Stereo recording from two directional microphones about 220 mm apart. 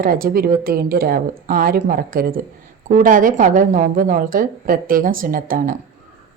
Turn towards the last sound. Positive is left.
turn(degrees=-40)  # may be behind; listen again after turning